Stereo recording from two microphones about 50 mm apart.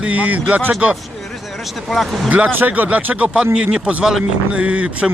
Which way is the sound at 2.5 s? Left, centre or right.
Right.